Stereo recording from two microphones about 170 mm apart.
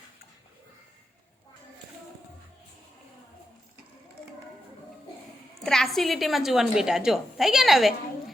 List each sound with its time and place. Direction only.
5.6 s a woman's voice: centre (ahead or behind)